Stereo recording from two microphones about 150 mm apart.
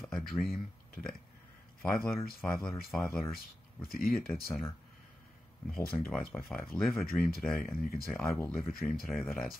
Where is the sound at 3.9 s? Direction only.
75° left (ahead or behind).